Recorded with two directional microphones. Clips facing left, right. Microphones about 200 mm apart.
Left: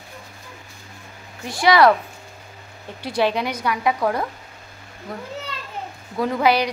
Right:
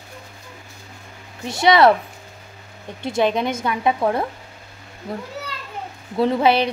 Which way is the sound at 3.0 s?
20° right (ahead or behind).